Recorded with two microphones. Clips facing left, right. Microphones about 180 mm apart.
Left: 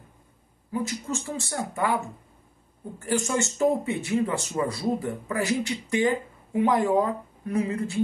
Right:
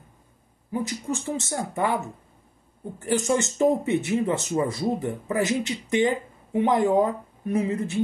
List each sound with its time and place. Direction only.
0.7 s speech: 15° right (ahead or behind)